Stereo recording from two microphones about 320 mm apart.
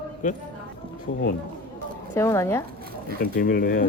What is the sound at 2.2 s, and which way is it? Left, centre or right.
Speech, centre.